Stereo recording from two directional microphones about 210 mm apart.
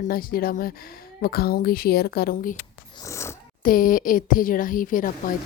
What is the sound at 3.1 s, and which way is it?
Speech, 15° left (ahead or behind).